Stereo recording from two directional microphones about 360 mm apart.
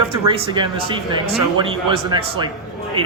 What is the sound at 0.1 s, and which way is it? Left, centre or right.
A man's voice, centre.